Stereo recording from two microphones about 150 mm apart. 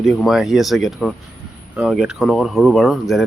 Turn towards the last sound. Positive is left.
turn(degrees=0)  # may be behind; listen again after turning